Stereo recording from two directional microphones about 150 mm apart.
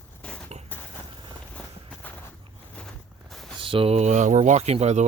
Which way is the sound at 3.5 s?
35° right (ahead or behind).